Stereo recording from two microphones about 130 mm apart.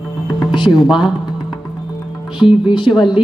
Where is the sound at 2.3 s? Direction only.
40° left (ahead or behind).